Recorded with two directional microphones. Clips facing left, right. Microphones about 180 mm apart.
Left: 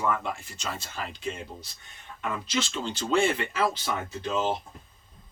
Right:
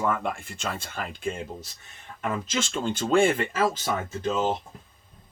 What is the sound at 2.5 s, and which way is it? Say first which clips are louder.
Speech: right 2 dB; 50° right (ahead or behind).